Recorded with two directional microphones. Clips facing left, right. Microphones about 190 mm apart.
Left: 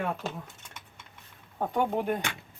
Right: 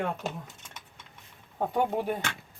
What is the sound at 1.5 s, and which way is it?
Speech, 5° right (ahead or behind).